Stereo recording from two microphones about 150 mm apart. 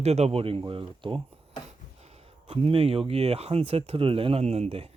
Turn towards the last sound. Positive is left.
turn(degrees=-40)  # may be behind; listen again after turning